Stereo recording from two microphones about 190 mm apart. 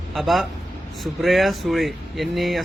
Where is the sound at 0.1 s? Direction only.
Centre (ahead or behind).